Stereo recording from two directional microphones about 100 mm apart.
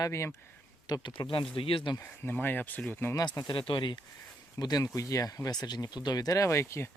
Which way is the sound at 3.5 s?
55° left (ahead or behind).